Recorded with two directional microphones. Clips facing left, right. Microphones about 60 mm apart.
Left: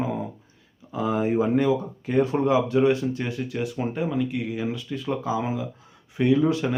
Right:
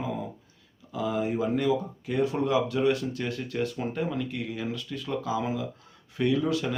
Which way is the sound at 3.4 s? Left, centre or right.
Centre.